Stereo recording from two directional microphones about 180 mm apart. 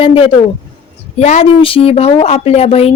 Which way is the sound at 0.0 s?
30° left (ahead or behind).